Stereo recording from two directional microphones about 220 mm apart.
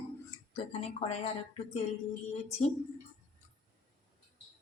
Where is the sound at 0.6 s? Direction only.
25° left (ahead or behind).